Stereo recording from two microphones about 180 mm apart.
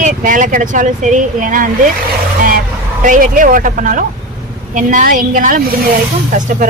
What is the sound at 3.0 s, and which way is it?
Speech, 45° right (ahead or behind).